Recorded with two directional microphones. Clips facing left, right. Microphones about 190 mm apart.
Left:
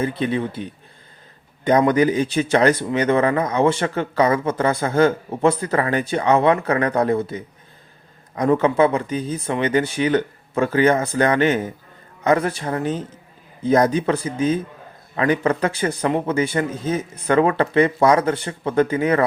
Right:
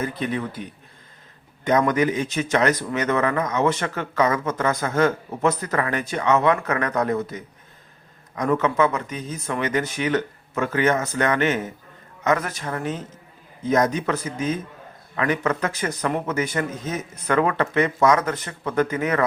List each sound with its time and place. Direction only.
0.0 s a man's voice: 30° left (ahead or behind)
1.9 s speech: 35° left (ahead or behind)